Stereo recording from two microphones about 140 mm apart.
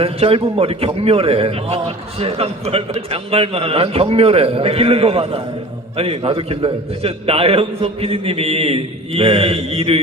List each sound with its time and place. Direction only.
0.0 s a man's voice: 45° right (ahead or behind)